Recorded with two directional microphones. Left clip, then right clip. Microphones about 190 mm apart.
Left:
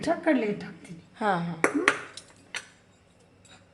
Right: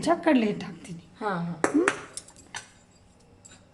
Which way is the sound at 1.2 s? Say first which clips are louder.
Left 4 dB; 30° left (ahead or behind).